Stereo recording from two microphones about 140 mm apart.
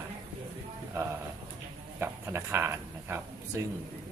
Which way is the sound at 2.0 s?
20° right (ahead or behind).